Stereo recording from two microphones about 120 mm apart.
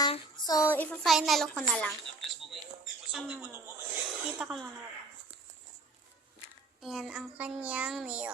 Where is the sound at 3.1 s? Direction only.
5° right (ahead or behind).